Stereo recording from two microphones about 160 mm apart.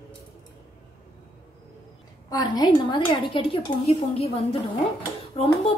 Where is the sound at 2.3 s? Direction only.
25° left (ahead or behind).